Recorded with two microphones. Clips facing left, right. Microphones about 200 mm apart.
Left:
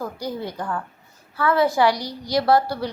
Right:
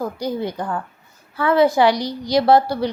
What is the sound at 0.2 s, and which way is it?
A woman's voice, 20° right (ahead or behind).